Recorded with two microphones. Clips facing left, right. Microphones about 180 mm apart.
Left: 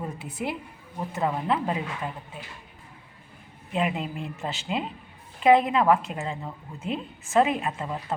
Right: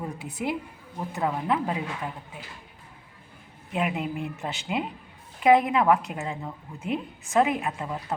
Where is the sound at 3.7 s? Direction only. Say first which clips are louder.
Even; 10° right (ahead or behind).